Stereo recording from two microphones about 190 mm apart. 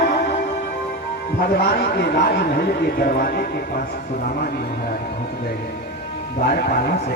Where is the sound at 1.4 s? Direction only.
60° left (ahead or behind).